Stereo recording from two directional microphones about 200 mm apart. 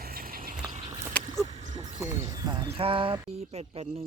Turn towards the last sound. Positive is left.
turn(degrees=-25)  # may be behind; listen again after turning